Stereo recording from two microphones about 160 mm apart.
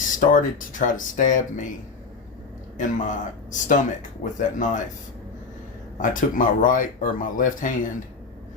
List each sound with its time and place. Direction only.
0.2 s speech: 55° left (ahead or behind)
2.7 s speech: 50° left (ahead or behind)
6.0 s speech: 60° left (ahead or behind)